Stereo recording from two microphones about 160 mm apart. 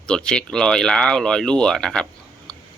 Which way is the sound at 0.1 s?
5° left (ahead or behind).